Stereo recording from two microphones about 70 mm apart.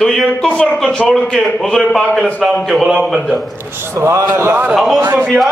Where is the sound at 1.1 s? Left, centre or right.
Centre.